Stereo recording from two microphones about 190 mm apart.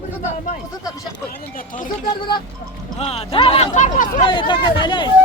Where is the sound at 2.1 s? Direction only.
25° left (ahead or behind); by 4.2 s 40° left (ahead or behind).